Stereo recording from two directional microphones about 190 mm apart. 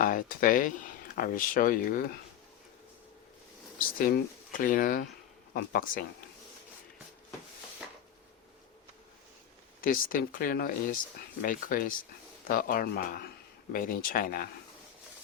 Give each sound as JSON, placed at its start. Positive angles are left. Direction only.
{"t": 0.0, "sound": "speech", "side_deg": 45}
{"t": 3.8, "sound": "speech", "side_deg": 50}
{"t": 9.8, "sound": "speech", "side_deg": 45}